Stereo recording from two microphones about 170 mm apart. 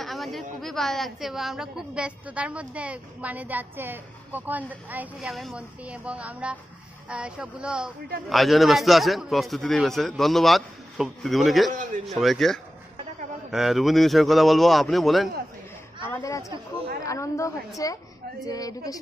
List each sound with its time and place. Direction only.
0.0 s a sound: centre (ahead or behind)
0.6 s a woman's voice: centre (ahead or behind)
16.1 s a woman's voice: 20° left (ahead or behind)